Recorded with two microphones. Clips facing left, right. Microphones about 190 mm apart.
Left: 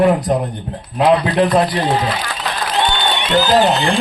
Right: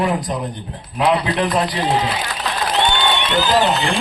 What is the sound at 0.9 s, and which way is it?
Speech, 35° left (ahead or behind).